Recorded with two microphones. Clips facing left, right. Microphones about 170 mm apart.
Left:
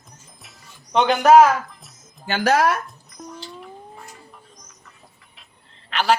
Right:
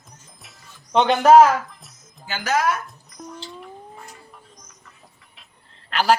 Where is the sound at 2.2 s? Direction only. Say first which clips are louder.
Left 4 dB; 60° left (ahead or behind).